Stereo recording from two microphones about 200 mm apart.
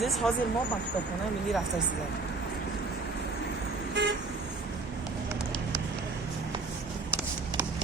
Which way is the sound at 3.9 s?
60° right (ahead or behind).